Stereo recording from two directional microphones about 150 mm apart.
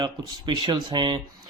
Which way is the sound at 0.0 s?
30° right (ahead or behind).